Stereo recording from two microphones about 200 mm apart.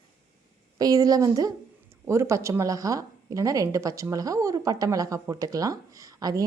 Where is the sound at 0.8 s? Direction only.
20° right (ahead or behind).